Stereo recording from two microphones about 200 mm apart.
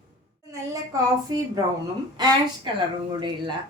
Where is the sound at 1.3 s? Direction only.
20° right (ahead or behind).